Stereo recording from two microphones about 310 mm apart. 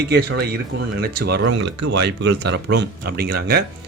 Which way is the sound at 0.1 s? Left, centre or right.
Right.